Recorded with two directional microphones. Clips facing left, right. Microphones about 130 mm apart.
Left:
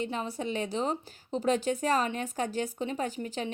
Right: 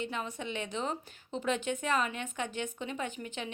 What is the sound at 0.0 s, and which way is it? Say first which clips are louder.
A woman's voice: left 4 dB; 35° left (ahead or behind).